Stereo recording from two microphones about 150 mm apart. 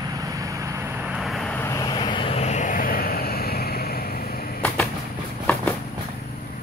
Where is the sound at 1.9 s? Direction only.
30° left (ahead or behind); by 4.0 s 90° left.